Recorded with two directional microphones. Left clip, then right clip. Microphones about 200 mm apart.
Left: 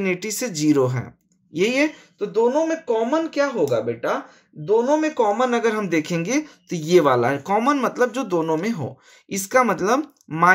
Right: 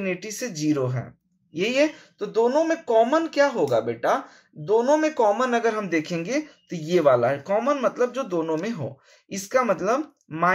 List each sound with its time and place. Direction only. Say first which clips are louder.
0.0 s a man's voice: left 5 dB; 45° left (ahead or behind)
2.1 s a man's voice: left 2 dB; 10° left (ahead or behind); by 10.5 s 45° left (ahead or behind)